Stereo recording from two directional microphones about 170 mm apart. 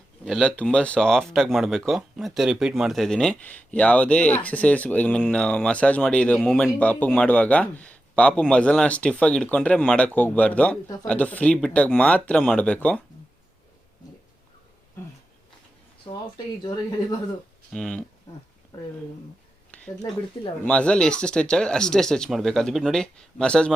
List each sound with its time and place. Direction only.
0.3 s a man's voice: 5° left (ahead or behind)
16.1 s speech: 25° left (ahead or behind)
17.7 s speech: 5° left (ahead or behind)
19.7 s a sound: 5° left (ahead or behind)
20.7 s speech: 5° left (ahead or behind)